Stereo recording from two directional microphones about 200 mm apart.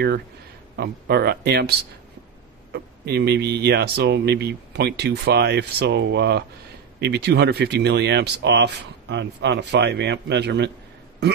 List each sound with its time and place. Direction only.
0.7 s speech: 55° right (ahead or behind)